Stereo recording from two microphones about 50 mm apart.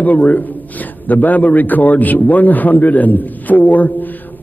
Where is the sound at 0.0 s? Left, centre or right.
Left.